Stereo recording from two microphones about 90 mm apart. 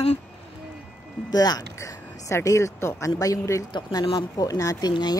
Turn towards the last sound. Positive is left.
turn(degrees=55)  # may be behind; listen again after turning